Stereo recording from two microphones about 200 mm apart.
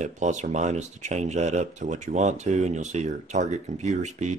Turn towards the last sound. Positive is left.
turn(degrees=-35)  # may be behind; listen again after turning